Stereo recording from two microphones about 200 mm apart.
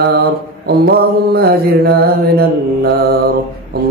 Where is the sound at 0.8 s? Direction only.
50° right (ahead or behind).